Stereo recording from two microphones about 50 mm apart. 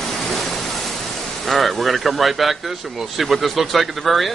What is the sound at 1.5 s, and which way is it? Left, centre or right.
Speech, centre.